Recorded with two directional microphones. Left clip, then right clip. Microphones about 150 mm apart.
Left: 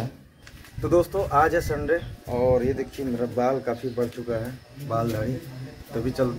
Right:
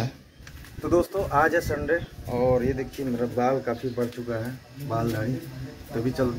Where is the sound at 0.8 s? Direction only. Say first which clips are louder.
Left 2 dB; 5° left (ahead or behind).